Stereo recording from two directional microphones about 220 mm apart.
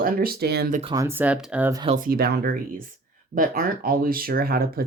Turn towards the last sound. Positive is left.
turn(degrees=-45)  # may be behind; listen again after turning